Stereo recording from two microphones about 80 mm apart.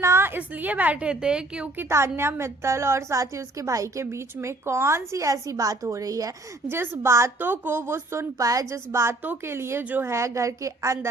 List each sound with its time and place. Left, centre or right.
0.0 s a woman's voice: right; by 1.7 s centre
1.8 s a woman's voice: right
4.0 s a woman's voice: right
6.7 s a woman's voice: right
7.3 s a woman's voice: right
8.9 s a woman's voice: right